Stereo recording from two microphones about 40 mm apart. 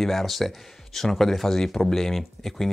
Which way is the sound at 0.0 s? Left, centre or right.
Centre.